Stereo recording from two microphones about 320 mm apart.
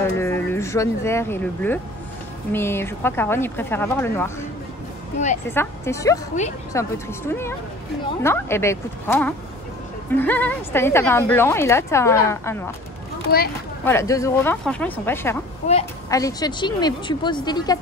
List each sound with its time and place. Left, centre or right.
0.0 s a woman's voice: centre
5.5 s a woman's voice: centre
13.3 s speech: left
13.8 s a woman's voice: centre